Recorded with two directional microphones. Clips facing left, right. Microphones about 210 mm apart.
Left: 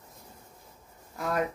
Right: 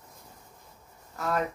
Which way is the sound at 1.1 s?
15° left (ahead or behind).